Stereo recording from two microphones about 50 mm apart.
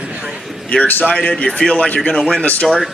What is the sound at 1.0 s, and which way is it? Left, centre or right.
Speech, left.